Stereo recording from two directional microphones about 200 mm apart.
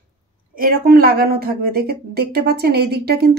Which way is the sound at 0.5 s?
45° right (ahead or behind).